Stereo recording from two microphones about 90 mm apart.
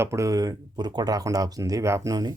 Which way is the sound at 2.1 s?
45° right (ahead or behind).